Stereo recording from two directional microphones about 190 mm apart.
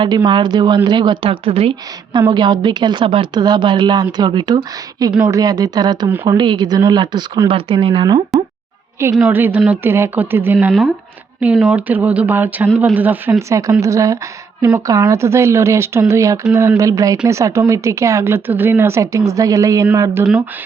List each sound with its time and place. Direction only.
0.3 s speech: 25° right (ahead or behind)
5.1 s speech: 10° right (ahead or behind)
5.4 s speech: 20° right (ahead or behind)
9.1 s speech: 5° right (ahead or behind)
10.7 s speech: centre (ahead or behind); by 20.2 s 15° right (ahead or behind)